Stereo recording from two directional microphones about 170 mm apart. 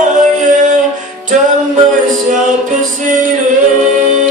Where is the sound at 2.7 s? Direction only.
45° right (ahead or behind).